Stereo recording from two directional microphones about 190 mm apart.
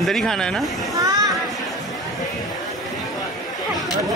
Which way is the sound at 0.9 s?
20° right (ahead or behind).